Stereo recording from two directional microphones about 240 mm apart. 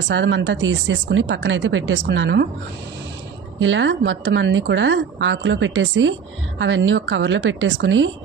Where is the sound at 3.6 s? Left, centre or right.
Right.